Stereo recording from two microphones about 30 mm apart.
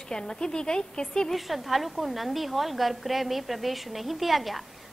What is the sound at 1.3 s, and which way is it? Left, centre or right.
A woman's voice, centre.